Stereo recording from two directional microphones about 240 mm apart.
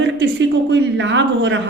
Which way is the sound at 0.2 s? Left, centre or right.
Right.